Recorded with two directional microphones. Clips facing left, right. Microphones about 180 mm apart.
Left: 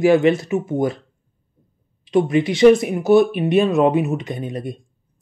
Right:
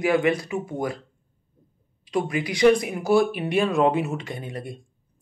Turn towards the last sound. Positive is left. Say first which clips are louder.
# left 7 dB
turn(degrees=20)  # may be behind; listen again after turning